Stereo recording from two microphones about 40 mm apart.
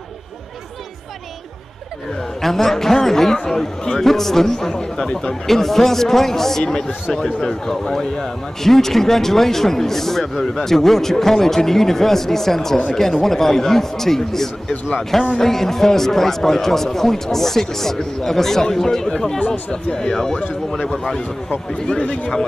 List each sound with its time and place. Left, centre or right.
2.4 s a man's voice: centre
21.8 s a man's voice: left